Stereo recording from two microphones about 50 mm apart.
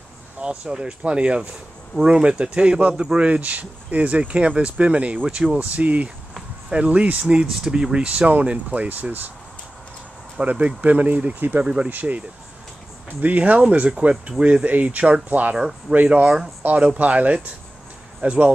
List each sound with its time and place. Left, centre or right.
0.4 s speech: centre; by 9.3 s right
10.4 s speech: right
11.6 s speech: centre
11.9 s speech: right
13.2 s speech: right